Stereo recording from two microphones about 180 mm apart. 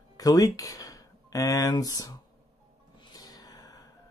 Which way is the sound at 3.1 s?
20° left (ahead or behind).